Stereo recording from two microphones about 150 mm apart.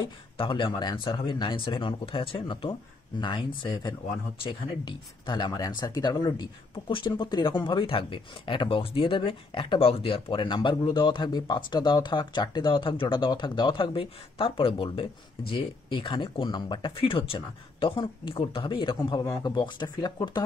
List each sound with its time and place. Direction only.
0.0 s speech: 35° left (ahead or behind)
19.2 s speech: 20° left (ahead or behind)
19.5 s speech: 30° left (ahead or behind)